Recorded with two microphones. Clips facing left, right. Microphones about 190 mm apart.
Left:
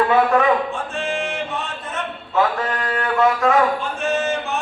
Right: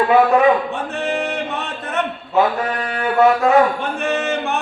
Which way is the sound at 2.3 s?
20° right (ahead or behind).